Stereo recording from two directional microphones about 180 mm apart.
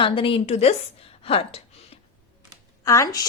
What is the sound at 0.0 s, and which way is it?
A woman's voice, 30° left (ahead or behind).